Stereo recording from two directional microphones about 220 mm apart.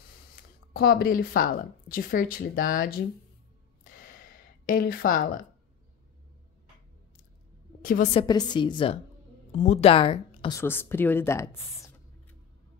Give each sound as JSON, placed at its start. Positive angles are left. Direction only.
{"t": 0.4, "sound": "speech", "side_deg": 45}
{"t": 3.8, "sound": "a sound", "side_deg": 40}
{"t": 7.8, "sound": "a woman's voice", "side_deg": 40}
{"t": 8.1, "sound": "a woman's voice", "side_deg": 20}
{"t": 10.6, "sound": "speech", "side_deg": 10}